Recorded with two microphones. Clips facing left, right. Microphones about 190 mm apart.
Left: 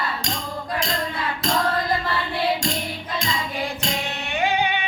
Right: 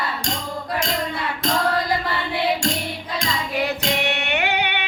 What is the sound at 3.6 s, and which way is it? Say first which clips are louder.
Music: right 4 dB; 70° right (ahead or behind).